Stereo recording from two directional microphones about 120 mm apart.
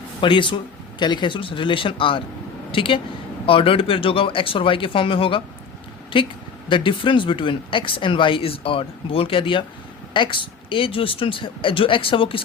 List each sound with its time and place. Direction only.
0.2 s speech: 45° left (ahead or behind)